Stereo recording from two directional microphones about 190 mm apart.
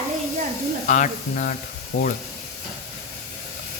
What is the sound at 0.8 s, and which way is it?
Speech, 40° left (ahead or behind).